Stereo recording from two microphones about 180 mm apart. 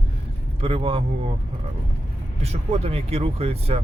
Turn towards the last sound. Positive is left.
turn(degrees=-35)  # may be behind; listen again after turning